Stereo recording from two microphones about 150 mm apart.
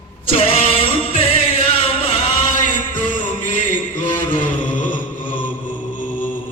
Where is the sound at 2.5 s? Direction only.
60° left (ahead or behind).